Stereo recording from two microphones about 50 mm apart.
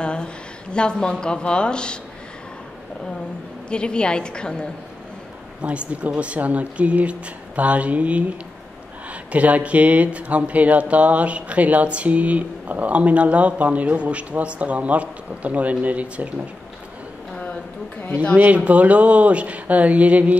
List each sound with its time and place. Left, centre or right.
0.0 s a woman's voice: centre
3.7 s a woman's voice: centre
5.6 s speech: right
18.3 s speech: right